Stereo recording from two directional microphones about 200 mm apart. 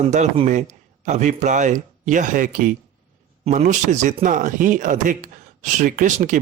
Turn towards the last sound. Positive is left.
turn(degrees=-40)  # may be behind; listen again after turning